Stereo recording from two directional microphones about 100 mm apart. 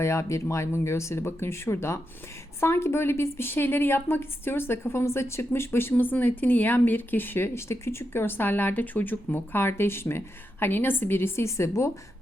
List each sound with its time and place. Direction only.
0.0 s speech: 30° left (ahead or behind)